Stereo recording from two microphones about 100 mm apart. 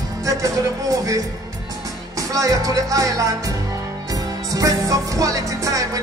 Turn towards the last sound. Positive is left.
turn(degrees=-35)  # may be behind; listen again after turning